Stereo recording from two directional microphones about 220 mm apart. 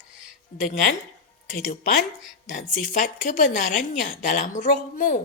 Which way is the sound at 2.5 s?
40° left (ahead or behind).